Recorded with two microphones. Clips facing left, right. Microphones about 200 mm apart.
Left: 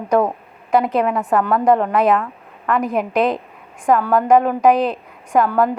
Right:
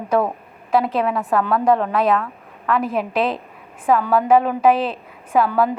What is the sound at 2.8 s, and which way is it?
Speech, 15° left (ahead or behind).